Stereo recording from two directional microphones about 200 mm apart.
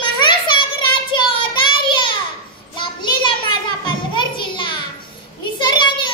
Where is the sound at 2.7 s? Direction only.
25° left (ahead or behind).